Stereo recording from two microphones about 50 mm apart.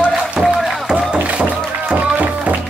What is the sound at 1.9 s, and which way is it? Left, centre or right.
Music, right.